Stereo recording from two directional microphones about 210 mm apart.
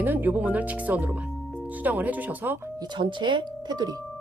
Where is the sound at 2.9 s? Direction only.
20° right (ahead or behind).